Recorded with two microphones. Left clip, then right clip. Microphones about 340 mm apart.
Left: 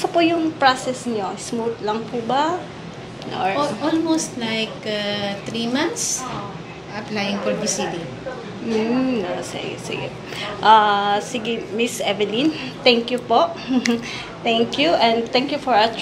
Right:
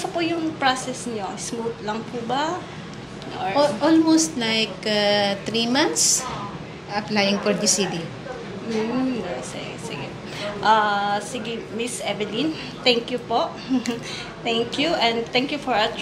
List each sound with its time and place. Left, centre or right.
0.0 s a woman's voice: left
1.9 s a woman's voice: left
3.5 s speech: right
10.4 s a woman's voice: left